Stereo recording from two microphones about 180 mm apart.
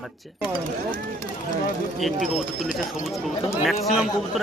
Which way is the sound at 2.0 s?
Centre (ahead or behind).